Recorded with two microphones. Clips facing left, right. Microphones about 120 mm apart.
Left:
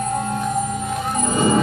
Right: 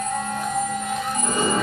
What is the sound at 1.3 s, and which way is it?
Music, 20° left (ahead or behind).